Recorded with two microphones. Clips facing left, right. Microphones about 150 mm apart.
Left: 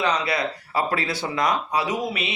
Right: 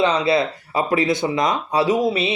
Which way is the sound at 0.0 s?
25° right (ahead or behind).